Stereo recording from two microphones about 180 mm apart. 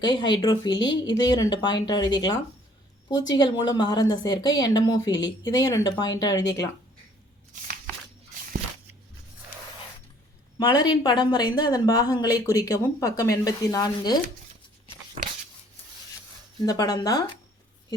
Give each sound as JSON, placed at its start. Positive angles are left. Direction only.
{"t": 0.0, "sound": "speech", "side_deg": 25}
{"t": 7.5, "sound": "a sound", "side_deg": -45}
{"t": 10.6, "sound": "speech", "side_deg": 25}
{"t": 16.6, "sound": "speech", "side_deg": 20}